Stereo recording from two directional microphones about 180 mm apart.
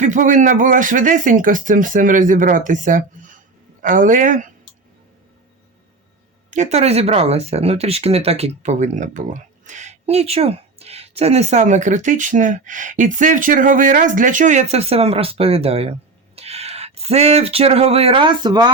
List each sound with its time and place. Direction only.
0.0 s speech: 45° right (ahead or behind)
6.5 s speech: 40° right (ahead or behind); by 18.7 s 25° right (ahead or behind)